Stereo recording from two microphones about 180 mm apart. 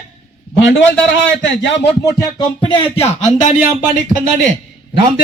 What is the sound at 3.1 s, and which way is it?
Speech, 35° left (ahead or behind).